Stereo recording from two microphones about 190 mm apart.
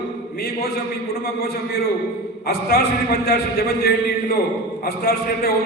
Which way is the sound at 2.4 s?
50° left (ahead or behind).